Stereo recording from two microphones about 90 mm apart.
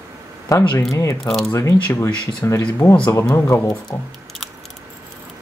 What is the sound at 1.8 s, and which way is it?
Speech, 25° left (ahead or behind).